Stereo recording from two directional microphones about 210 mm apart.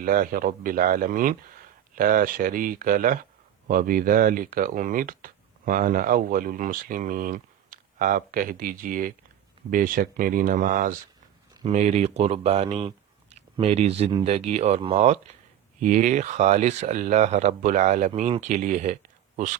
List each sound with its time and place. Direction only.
0.0 s speech: 40° right (ahead or behind)